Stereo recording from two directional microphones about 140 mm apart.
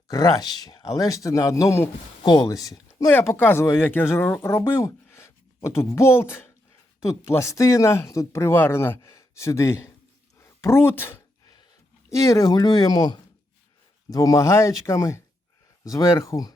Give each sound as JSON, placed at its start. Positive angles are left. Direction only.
{"t": 0.1, "sound": "speech", "side_deg": 25}
{"t": 3.1, "sound": "speech", "side_deg": 15}